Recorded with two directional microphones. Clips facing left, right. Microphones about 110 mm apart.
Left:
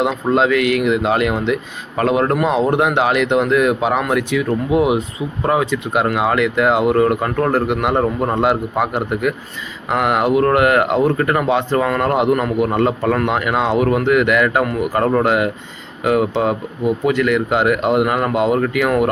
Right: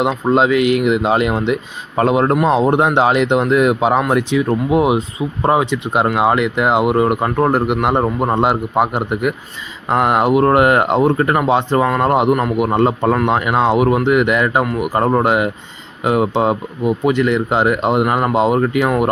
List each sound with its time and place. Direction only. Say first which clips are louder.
0.0 s speech: right 1 dB; 20° right (ahead or behind)